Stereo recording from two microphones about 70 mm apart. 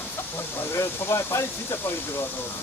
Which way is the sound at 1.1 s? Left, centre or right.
Left.